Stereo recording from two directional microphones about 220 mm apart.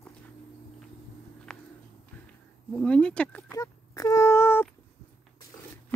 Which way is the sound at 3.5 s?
15° left (ahead or behind).